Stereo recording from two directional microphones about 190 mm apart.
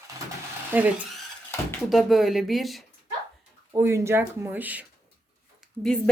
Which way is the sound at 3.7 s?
15° right (ahead or behind).